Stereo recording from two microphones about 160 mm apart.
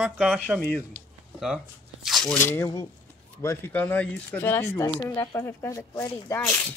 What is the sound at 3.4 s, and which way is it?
Speech, 15° left (ahead or behind).